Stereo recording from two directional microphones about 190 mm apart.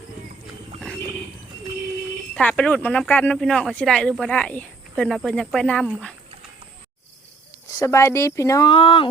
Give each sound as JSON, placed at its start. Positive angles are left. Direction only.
{"t": 2.3, "sound": "speech", "side_deg": 5}
{"t": 7.8, "sound": "speech", "side_deg": 15}